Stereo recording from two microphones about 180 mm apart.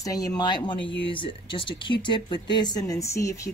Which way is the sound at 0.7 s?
90° left.